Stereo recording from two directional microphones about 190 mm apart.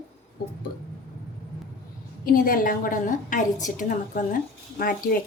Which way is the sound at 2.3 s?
50° left (ahead or behind).